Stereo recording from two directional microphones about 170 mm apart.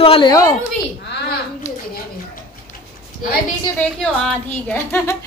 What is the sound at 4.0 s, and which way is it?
A woman's voice, 10° left (ahead or behind).